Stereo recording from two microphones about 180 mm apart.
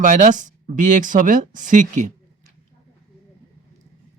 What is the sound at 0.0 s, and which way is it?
Speech, 45° right (ahead or behind).